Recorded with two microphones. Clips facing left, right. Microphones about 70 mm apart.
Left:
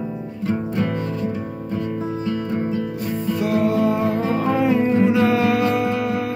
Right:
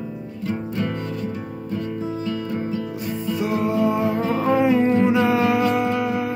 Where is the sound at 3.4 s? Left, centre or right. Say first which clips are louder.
Left 2 dB; centre.